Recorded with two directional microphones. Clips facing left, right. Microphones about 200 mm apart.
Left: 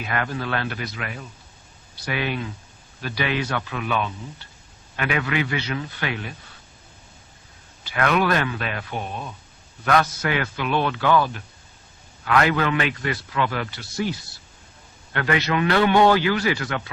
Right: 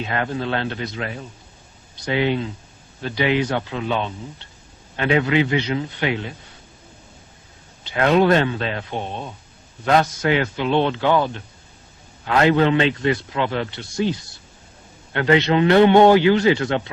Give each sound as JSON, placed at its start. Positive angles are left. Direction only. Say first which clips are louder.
{"t": 0.0, "sound": "a man's voice", "louder": "right 3 dB", "side_deg": -25}
{"t": 7.9, "sound": "a man's voice", "louder": "right 5 dB", "side_deg": -25}